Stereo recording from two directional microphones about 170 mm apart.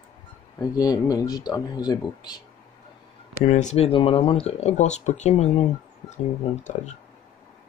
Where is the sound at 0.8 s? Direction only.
20° left (ahead or behind).